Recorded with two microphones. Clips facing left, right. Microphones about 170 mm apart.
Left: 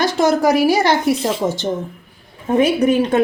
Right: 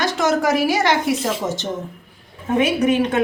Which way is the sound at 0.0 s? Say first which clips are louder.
Left 4 dB; 35° left (ahead or behind).